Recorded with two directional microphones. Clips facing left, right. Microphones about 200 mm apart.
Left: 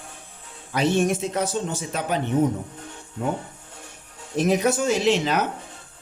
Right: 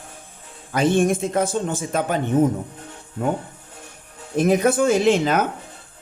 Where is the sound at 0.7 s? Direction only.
50° right (ahead or behind).